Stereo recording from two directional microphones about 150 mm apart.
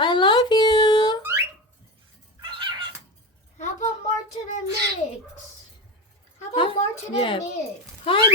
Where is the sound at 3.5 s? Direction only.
55° left (ahead or behind).